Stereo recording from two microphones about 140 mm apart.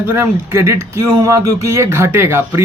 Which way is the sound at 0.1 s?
15° right (ahead or behind).